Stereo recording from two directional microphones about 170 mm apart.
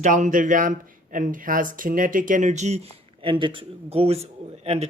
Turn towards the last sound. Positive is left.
turn(degrees=-40)  # may be behind; listen again after turning